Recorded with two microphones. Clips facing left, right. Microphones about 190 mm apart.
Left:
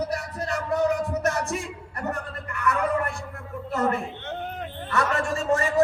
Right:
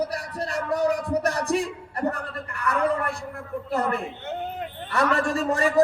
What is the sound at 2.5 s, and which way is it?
Speech, 35° right (ahead or behind).